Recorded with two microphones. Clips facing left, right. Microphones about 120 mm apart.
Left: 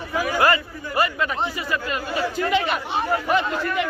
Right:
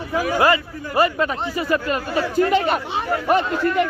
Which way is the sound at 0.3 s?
20° right (ahead or behind).